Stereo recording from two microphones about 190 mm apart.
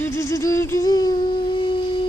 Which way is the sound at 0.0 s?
15° left (ahead or behind).